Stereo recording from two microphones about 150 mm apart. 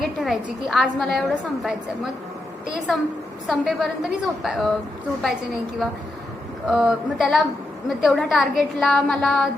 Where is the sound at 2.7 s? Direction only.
5° right (ahead or behind).